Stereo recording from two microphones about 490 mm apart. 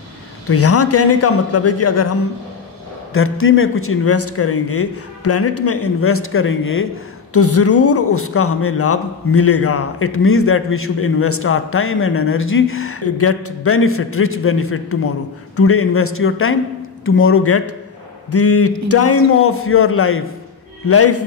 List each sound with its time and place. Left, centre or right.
0.5 s a man's voice: left
3.1 s a man's voice: left